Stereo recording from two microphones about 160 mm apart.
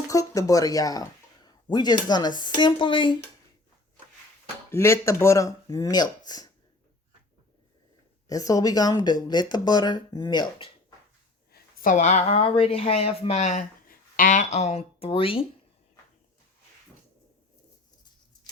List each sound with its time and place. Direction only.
0.1 s speech: 20° left (ahead or behind)
4.7 s speech: 15° left (ahead or behind)
8.3 s speech: 20° left (ahead or behind)
11.5 s speech: 60° left (ahead or behind); by 15.4 s 35° left (ahead or behind)